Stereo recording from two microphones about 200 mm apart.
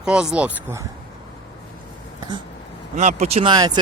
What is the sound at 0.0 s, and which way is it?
Speech, 5° right (ahead or behind).